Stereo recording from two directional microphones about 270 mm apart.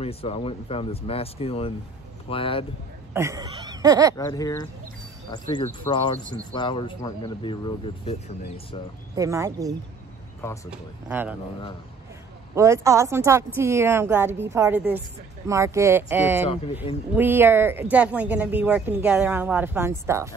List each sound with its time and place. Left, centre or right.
0.0 s speech: left
3.1 s a sound: centre
4.2 s speech: centre
5.9 s speech: centre
9.1 s speech: centre
11.1 s speech: centre
12.5 s speech: centre